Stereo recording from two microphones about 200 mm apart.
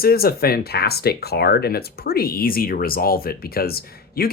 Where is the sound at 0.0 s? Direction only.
50° left (ahead or behind).